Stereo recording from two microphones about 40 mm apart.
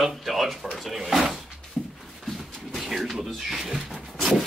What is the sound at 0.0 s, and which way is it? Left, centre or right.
Drawer open or close, centre.